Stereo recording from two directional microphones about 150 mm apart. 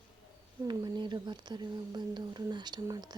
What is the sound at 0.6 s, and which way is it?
Speech, 25° right (ahead or behind).